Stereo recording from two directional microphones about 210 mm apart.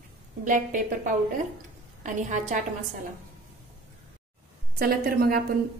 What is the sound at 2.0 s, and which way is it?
Speech, 35° right (ahead or behind).